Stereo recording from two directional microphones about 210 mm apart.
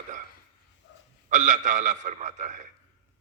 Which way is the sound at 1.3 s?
35° right (ahead or behind).